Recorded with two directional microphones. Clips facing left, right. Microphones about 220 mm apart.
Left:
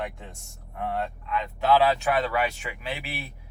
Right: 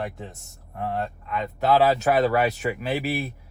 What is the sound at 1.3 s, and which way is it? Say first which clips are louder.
Speech: right 1 dB; 45° right (ahead or behind).